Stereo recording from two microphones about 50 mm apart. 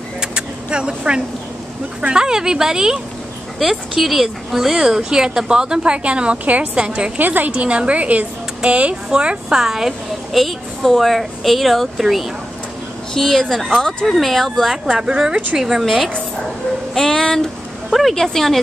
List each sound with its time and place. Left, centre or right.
0.2 s vehicle: centre
2.0 s a woman's voice: centre; by 7.5 s right
7.5 s speech: right
9.6 s a woman's voice: centre
14.9 s speech: centre
17.8 s speech: centre
18.1 s speech: centre